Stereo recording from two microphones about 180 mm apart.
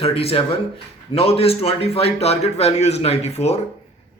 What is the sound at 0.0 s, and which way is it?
A man's voice, 35° left (ahead or behind).